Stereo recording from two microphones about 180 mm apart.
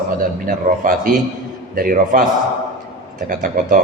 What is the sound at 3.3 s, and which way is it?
Speech, 50° right (ahead or behind).